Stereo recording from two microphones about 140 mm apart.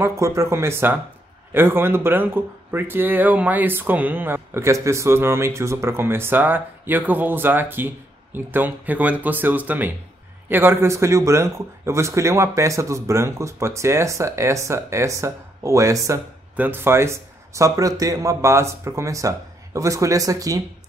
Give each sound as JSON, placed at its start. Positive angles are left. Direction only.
{"t": 0.0, "sound": "speech", "side_deg": -20}